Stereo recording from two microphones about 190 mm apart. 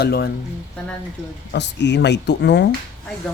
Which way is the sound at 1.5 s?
65° left (ahead or behind).